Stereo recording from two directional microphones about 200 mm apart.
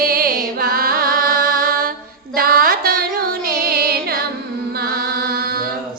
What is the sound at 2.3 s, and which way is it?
Music, 50° right (ahead or behind).